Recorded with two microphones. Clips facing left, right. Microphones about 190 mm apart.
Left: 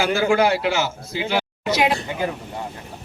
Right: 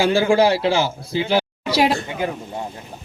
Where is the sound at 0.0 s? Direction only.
30° right (ahead or behind).